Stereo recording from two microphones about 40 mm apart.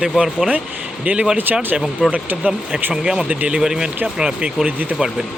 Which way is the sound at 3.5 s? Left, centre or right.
Centre.